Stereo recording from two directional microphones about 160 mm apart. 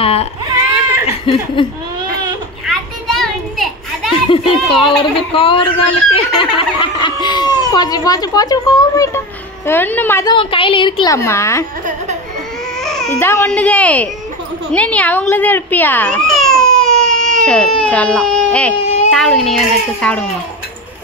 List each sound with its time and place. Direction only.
0.0 s baby cry: 40° left (ahead or behind)
1.0 s chuckle: 35° left (ahead or behind)
2.6 s children playing: centre (ahead or behind)
4.3 s a child's voice: 35° left (ahead or behind); by 10.2 s 10° left (ahead or behind)
10.2 s speech: 35° left (ahead or behind)
11.1 s a woman's voice: 15° left (ahead or behind)
12.8 s baby cry: centre (ahead or behind)
13.2 s a woman's voice: 15° left (ahead or behind)